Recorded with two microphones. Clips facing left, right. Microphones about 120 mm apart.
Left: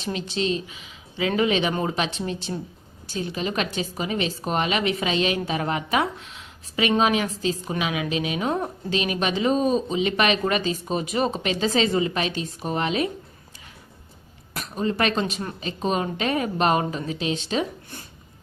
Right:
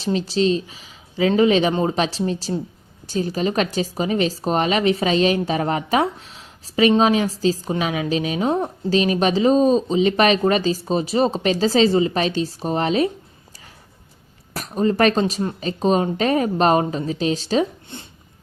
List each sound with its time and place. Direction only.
0.0 s a woman's voice: 35° right (ahead or behind)
14.5 s a woman's voice: 40° right (ahead or behind)
17.9 s a sound: 25° right (ahead or behind)